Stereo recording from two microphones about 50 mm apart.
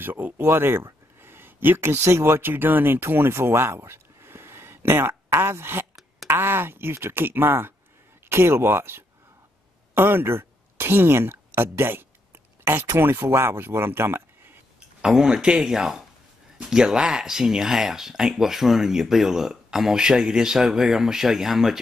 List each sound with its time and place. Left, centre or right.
0.0 s speech: right
1.2 s a sound: right
2.1 s speech: right
13.1 s speech: right
15.0 s speech: centre